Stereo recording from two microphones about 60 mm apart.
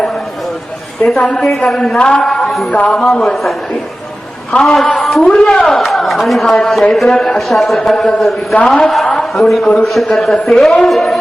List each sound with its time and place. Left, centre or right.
1.2 s a woman's voice: centre
1.5 s a man's voice: centre
2.0 s a woman's voice: centre
2.4 s a man's voice: centre
2.7 s speech: left
3.0 s a man's voice: centre
4.5 s a woman's voice: centre
5.2 s a woman's voice: centre
5.7 s a man's voice: centre